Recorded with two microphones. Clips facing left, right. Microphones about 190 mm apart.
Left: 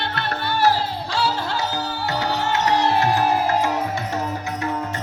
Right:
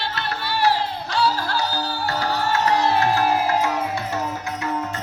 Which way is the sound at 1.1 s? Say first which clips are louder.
Right 2 dB; 25° left (ahead or behind).